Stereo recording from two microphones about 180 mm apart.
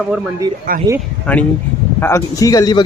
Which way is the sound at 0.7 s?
55° right (ahead or behind).